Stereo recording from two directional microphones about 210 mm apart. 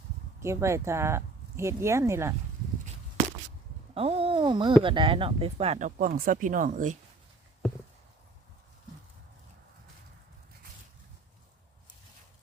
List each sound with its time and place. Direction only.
0.3 s speech: 15° right (ahead or behind)
3.9 s a sound: 25° right (ahead or behind)
4.8 s speech: 25° right (ahead or behind); by 6.9 s 40° right (ahead or behind)